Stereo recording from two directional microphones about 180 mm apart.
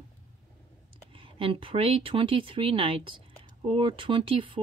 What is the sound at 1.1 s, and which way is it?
Speech, 30° right (ahead or behind).